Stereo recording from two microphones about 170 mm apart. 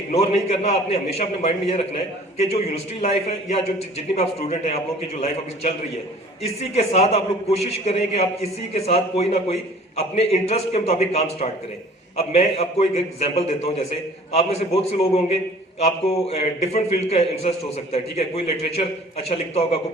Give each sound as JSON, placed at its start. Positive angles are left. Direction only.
{"t": 0.1, "sound": "a man's voice", "side_deg": 35}